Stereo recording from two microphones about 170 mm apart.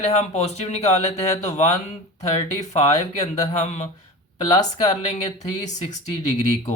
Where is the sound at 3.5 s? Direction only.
45° left (ahead or behind).